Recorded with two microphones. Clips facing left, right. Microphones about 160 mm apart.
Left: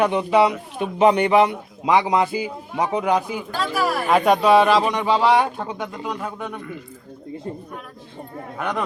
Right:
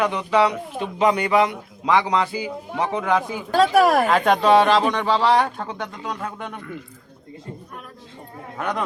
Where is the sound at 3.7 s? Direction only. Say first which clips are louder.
Right 6 dB; 75° right (ahead or behind).